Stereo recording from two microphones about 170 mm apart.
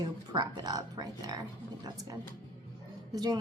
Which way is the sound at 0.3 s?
25° right (ahead or behind).